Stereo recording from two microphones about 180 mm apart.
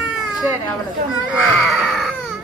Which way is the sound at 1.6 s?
Centre (ahead or behind).